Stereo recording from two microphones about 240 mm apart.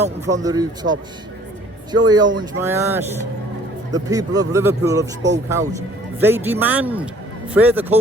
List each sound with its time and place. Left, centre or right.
0.4 s speech: centre